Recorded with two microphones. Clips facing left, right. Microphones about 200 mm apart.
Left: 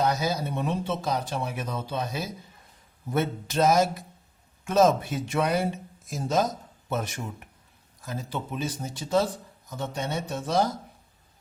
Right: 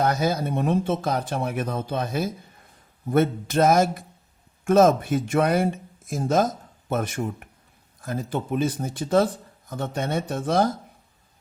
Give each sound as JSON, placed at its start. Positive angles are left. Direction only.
{"t": 0.0, "sound": "speech", "side_deg": -55}